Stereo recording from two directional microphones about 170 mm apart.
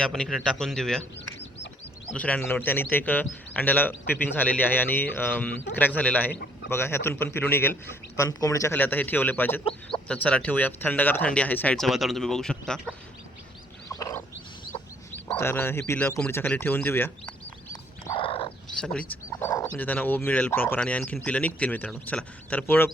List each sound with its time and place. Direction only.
0.0 s a man's voice: 5° left (ahead or behind)
2.1 s speech: 10° left (ahead or behind)
13.9 s wild animals: 15° left (ahead or behind)
14.7 s chicken: 30° left (ahead or behind)
15.4 s speech: 15° left (ahead or behind)
18.2 s bird: 35° left (ahead or behind)
18.8 s speech: 10° left (ahead or behind)